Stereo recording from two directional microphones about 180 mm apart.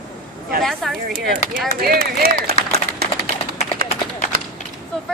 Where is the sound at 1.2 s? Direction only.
55° right (ahead or behind).